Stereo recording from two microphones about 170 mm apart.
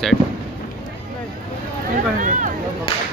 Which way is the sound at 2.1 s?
50° right (ahead or behind).